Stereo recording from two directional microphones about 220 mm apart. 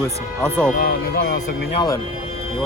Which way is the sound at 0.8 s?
45° left (ahead or behind).